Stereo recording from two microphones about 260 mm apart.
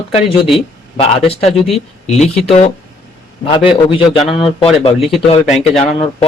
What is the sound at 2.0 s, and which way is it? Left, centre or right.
Speech, left.